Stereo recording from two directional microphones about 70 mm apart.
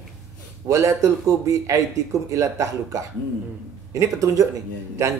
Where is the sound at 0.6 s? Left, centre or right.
Right.